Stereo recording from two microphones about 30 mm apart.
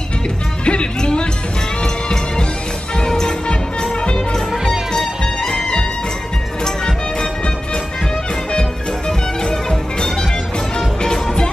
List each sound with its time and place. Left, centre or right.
0.7 s music: left
3.1 s music: centre
4.9 s music: left
9.4 s music: left